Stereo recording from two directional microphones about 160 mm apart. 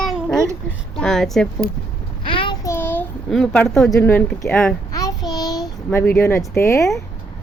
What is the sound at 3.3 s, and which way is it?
A woman's voice, centre (ahead or behind).